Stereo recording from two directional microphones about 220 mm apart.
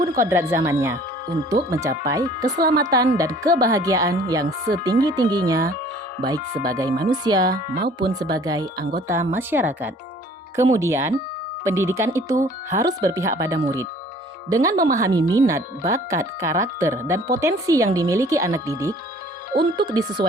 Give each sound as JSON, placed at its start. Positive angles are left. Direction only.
{"t": 0.2, "sound": "speech", "side_deg": -10}